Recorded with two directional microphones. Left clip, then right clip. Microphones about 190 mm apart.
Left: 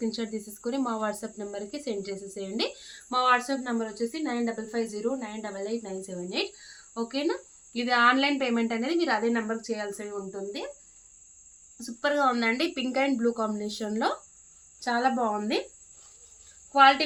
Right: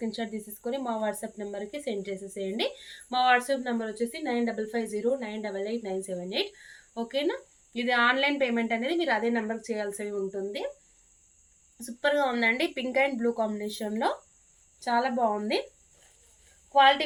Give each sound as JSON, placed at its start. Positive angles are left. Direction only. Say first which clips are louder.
{"t": 0.0, "sound": "a woman's voice", "louder": "left 2 dB", "side_deg": 20}
{"t": 11.8, "sound": "a woman's voice", "louder": "even", "side_deg": 15}